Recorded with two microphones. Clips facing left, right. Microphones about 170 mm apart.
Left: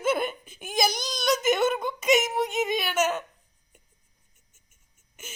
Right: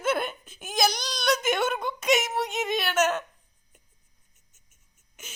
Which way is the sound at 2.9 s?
10° left (ahead or behind).